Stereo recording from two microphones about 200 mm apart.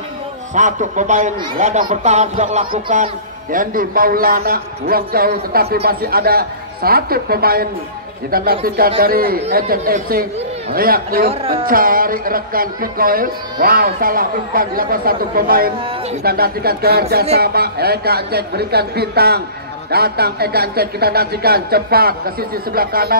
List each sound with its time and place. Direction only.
0.6 s a man's voice: 40° right (ahead or behind)